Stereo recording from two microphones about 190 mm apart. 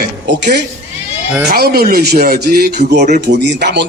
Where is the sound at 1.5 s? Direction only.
55° right (ahead or behind).